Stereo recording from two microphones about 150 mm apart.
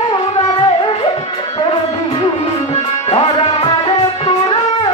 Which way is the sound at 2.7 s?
40° left (ahead or behind).